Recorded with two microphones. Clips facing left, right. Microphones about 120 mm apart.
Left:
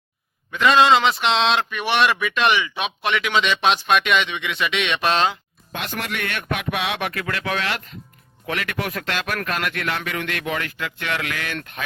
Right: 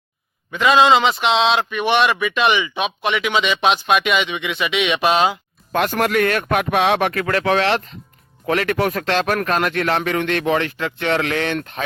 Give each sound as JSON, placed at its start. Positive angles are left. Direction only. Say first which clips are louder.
{"t": 0.5, "sound": "speech", "louder": "right 2 dB", "side_deg": 0}
{"t": 5.7, "sound": "speech", "louder": "right 11 dB", "side_deg": -45}